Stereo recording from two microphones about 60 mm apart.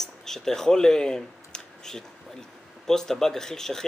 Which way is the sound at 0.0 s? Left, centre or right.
Centre.